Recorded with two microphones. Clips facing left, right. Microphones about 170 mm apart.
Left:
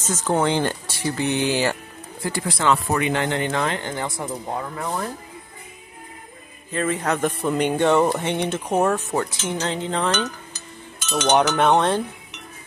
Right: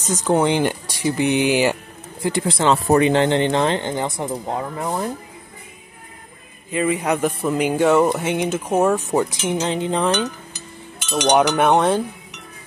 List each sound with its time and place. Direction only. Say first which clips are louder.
0.0 s speech: right 3 dB; 15° right (ahead or behind)
6.7 s speech: right 3 dB; 10° right (ahead or behind)